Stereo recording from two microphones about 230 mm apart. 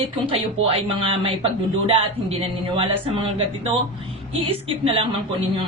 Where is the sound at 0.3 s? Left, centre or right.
Right.